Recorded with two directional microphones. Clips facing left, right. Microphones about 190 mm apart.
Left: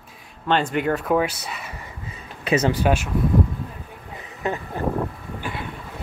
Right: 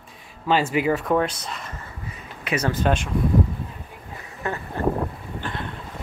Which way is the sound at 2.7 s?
10° left (ahead or behind).